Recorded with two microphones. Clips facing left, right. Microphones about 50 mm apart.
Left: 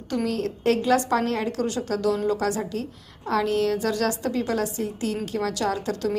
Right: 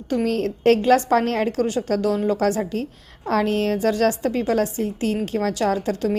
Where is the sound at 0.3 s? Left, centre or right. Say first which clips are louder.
Right 6 dB; right.